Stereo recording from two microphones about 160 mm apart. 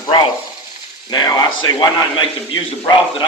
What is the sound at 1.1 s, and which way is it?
A man's voice, 25° left (ahead or behind).